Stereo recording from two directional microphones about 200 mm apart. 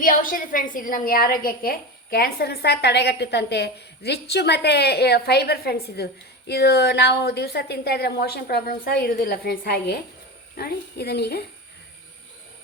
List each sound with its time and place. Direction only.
0.0 s a woman's voice: 45° left (ahead or behind)